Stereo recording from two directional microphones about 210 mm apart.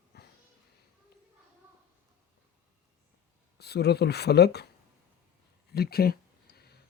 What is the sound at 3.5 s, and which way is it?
Speech, 50° left (ahead or behind).